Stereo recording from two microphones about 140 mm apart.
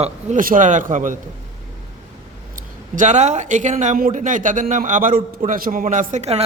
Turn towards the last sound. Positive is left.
turn(degrees=-50)  # may be behind; listen again after turning